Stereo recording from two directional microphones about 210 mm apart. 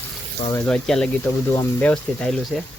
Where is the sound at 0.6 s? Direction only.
5° left (ahead or behind).